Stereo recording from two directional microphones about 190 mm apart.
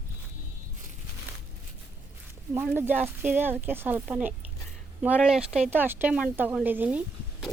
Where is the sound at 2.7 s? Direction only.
10° right (ahead or behind).